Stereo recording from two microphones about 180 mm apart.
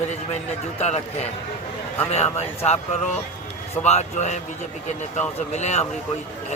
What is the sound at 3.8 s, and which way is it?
Speech, 40° left (ahead or behind).